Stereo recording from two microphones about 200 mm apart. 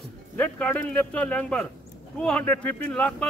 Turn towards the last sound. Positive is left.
turn(degrees=5)  # may be behind; listen again after turning